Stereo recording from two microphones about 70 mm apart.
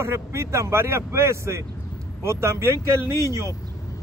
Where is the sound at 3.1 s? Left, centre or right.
Left.